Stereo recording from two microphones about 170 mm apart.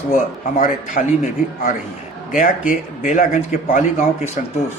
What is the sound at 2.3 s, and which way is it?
Speech, 50° left (ahead or behind).